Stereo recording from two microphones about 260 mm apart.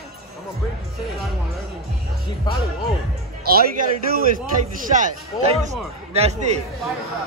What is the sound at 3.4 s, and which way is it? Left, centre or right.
A man's voice, right.